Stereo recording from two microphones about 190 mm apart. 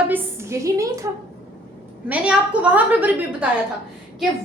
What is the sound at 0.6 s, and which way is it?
Speech, 15° right (ahead or behind).